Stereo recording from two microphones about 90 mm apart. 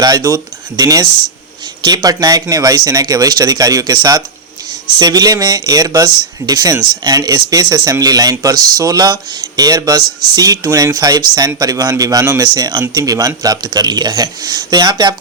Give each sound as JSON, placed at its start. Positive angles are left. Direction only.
{"t": 0.0, "sound": "speech", "side_deg": -40}
{"t": 12.4, "sound": "speech", "side_deg": -45}